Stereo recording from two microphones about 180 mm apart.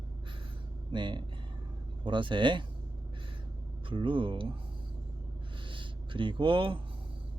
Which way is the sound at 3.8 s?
30° right (ahead or behind).